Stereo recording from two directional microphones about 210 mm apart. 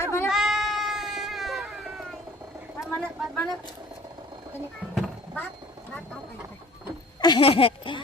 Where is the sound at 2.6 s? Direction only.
Centre (ahead or behind).